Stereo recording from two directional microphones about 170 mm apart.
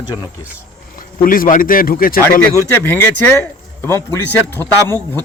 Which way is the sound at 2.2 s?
15° left (ahead or behind).